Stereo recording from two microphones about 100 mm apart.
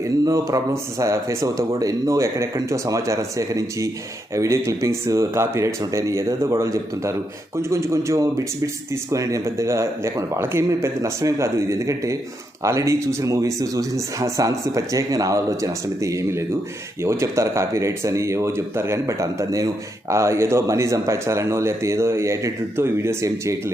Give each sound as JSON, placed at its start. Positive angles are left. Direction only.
{"t": 0.3, "sound": "speech", "side_deg": -30}